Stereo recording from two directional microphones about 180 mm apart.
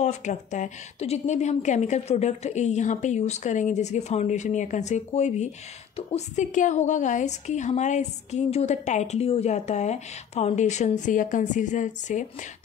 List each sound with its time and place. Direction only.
0.0 s a woman's voice: 40° left (ahead or behind)